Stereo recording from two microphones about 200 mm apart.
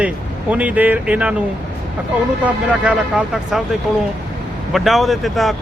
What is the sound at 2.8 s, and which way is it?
Speech, 5° right (ahead or behind).